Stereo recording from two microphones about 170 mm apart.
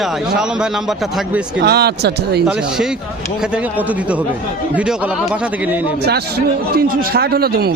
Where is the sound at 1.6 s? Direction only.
70° right (ahead or behind).